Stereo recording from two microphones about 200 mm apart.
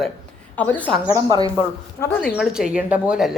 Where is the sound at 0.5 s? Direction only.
10° left (ahead or behind).